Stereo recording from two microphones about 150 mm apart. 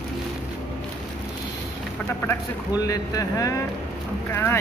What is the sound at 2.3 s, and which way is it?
Speech, 25° left (ahead or behind).